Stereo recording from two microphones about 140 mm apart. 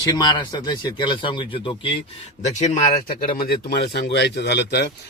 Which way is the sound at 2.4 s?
60° left (ahead or behind).